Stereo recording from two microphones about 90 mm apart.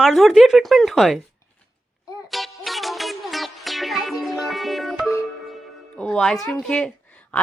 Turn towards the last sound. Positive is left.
turn(degrees=15)  # may be behind; listen again after turning